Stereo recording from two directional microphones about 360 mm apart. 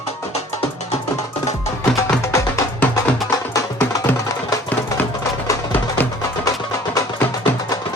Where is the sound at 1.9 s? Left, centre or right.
Centre.